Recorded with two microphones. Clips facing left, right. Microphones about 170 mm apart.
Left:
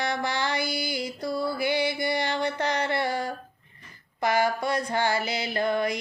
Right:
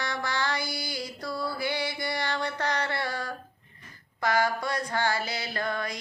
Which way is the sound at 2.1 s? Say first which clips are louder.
Left 4 dB; 20° left (ahead or behind).